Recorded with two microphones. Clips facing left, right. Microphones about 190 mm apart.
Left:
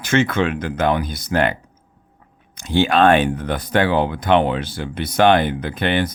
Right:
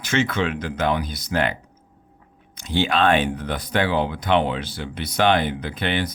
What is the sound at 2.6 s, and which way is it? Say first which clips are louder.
Speech: left 5 dB; 50° left (ahead or behind).